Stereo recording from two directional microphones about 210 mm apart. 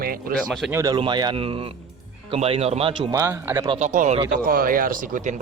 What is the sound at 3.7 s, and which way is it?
A man's voice, 35° right (ahead or behind).